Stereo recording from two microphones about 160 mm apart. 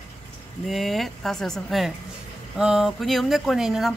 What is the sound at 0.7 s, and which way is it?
Speech, centre (ahead or behind).